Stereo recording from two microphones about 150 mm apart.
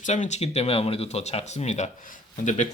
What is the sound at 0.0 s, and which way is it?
Speech, 55° left (ahead or behind).